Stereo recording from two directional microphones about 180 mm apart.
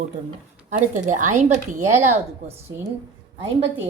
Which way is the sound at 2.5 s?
15° right (ahead or behind).